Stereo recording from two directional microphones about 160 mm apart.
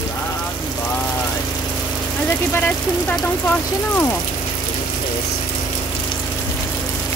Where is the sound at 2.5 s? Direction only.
10° left (ahead or behind).